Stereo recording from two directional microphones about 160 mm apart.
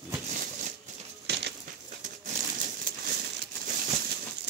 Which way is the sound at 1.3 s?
90° right.